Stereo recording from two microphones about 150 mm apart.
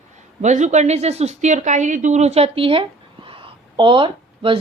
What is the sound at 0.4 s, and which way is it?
A woman's voice, 50° right (ahead or behind).